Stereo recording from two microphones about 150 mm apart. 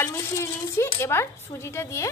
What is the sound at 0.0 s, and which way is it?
Speech, 15° left (ahead or behind).